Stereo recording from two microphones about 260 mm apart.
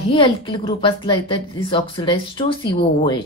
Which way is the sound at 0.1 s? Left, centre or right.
Centre.